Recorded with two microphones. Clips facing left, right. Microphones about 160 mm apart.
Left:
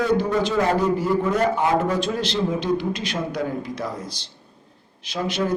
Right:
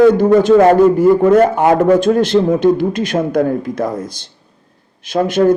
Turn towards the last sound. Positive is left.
turn(degrees=-50)  # may be behind; listen again after turning